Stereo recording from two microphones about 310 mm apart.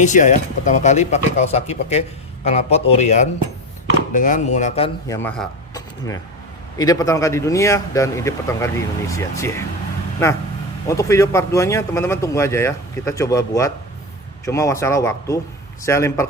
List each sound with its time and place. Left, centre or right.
0.0 s speech: left
5.0 s a man's voice: centre
10.8 s a man's voice: centre